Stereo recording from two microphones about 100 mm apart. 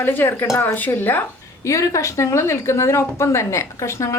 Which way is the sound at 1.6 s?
30° left (ahead or behind).